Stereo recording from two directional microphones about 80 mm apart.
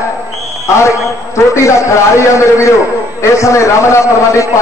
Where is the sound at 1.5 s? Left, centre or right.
Left.